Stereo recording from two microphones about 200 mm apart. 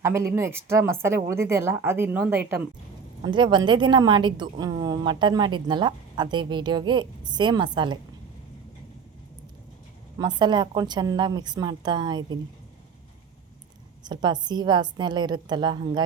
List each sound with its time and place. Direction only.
0.0 s a woman's voice: 15° right (ahead or behind)
3.2 s a woman's voice: 25° right (ahead or behind)
10.2 s a woman's voice: 20° right (ahead or behind)
14.0 s a woman's voice: 20° right (ahead or behind)